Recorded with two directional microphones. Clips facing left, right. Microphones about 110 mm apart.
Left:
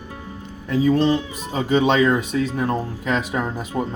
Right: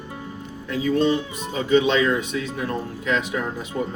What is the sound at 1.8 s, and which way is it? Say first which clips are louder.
Speech: left 3 dB; 50° left (ahead or behind).